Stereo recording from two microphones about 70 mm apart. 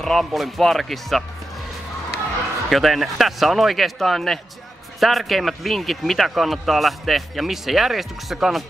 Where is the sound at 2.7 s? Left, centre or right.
Centre.